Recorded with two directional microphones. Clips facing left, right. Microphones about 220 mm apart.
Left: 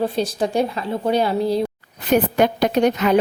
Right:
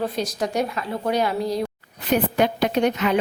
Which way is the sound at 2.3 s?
45° left (ahead or behind).